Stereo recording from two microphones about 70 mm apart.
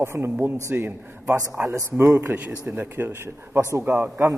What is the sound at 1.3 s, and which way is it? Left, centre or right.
Speech, right.